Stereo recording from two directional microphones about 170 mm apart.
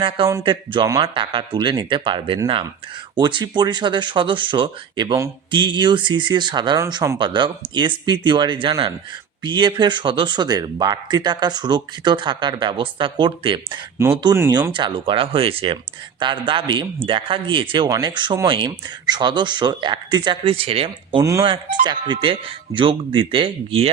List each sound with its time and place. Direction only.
0.0 s speech: 25° right (ahead or behind)
21.2 s speech: 20° right (ahead or behind)
21.4 s speech: 30° right (ahead or behind)